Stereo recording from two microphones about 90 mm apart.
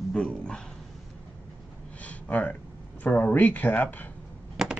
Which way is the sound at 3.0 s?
20° left (ahead or behind).